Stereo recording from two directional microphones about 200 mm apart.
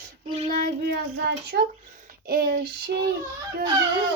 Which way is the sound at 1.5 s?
55° right (ahead or behind).